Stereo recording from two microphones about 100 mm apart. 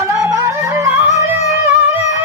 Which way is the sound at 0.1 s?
30° right (ahead or behind).